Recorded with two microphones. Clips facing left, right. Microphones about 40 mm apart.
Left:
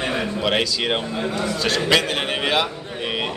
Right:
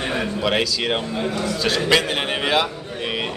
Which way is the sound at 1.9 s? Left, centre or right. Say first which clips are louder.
Right 1 dB; centre.